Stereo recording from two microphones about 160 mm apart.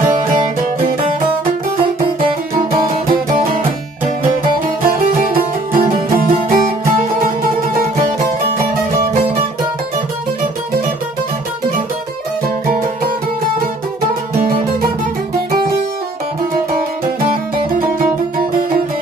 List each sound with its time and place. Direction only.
2.7 s music: 60° right (ahead or behind)
4.8 s music: 65° right (ahead or behind)
8.5 s music: 65° right (ahead or behind)